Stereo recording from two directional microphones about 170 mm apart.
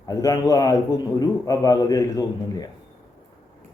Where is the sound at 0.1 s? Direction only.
20° left (ahead or behind).